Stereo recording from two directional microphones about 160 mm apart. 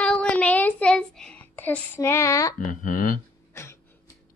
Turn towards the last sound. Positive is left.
turn(degrees=15)  # may be behind; listen again after turning